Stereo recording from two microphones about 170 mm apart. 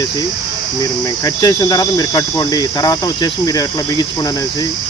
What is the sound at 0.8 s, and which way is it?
Cricket, 20° left (ahead or behind).